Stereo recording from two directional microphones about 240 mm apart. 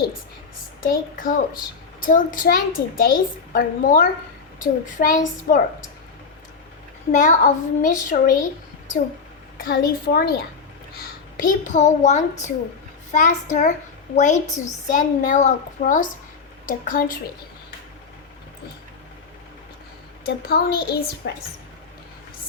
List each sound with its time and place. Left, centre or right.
0.8 s a child's voice: left
7.1 s a child's voice: left
9.6 s a child's voice: left
11.3 s a child's voice: left
20.2 s a child's voice: left